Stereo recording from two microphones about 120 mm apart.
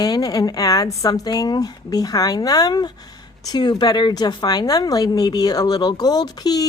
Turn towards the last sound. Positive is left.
turn(degrees=35)  # may be behind; listen again after turning